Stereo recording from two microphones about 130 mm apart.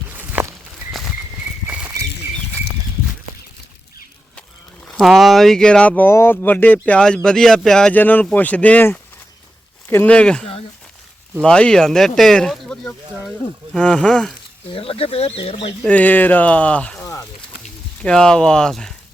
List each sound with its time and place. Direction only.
0.1 s walk: 15° right (ahead or behind)
1.6 s a sound: 10° right (ahead or behind)
4.9 s speech: centre (ahead or behind)
14.7 s speech: 45° left (ahead or behind)
15.8 s speech: 10° left (ahead or behind)
17.0 s snake: 25° left (ahead or behind)
18.0 s speech: 5° left (ahead or behind)